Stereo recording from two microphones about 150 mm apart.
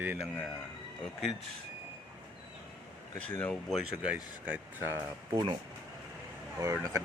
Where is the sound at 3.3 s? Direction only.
15° left (ahead or behind).